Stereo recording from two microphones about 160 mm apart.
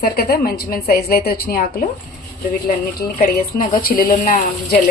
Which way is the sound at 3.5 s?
60° left (ahead or behind).